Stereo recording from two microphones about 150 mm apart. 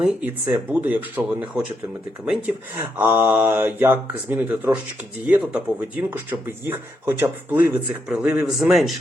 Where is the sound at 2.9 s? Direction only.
15° right (ahead or behind).